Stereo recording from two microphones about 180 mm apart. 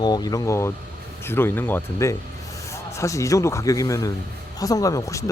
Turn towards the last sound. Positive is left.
turn(degrees=15)  # may be behind; listen again after turning